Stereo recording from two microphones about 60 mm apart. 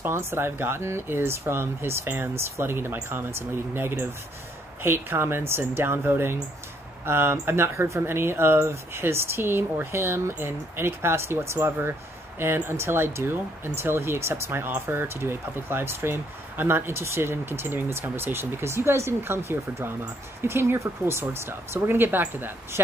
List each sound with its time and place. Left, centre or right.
0.0 s speech: right